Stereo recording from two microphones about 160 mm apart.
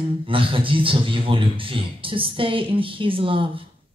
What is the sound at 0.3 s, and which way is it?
A man's voice, 35° right (ahead or behind).